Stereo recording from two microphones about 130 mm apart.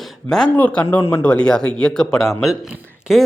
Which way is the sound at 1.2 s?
10° left (ahead or behind).